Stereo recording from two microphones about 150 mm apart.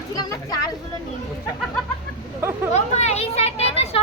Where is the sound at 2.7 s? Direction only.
45° left (ahead or behind).